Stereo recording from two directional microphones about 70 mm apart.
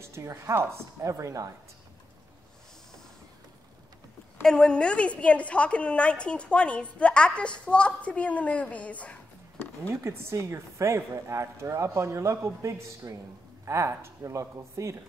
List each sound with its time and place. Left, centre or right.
0.0 s speech: right
4.4 s a woman's voice: centre
9.8 s speech: right